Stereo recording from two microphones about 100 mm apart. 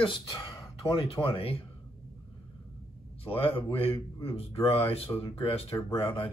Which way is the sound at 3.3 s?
65° left (ahead or behind).